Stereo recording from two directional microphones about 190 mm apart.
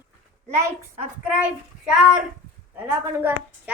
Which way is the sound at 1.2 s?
5° right (ahead or behind).